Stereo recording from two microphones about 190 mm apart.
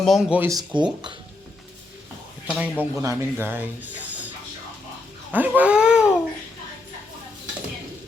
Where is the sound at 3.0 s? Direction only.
15° right (ahead or behind).